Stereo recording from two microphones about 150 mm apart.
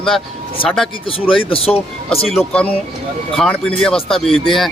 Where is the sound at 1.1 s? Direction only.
35° left (ahead or behind).